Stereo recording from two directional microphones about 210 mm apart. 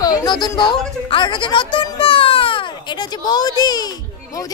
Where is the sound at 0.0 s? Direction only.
15° left (ahead or behind).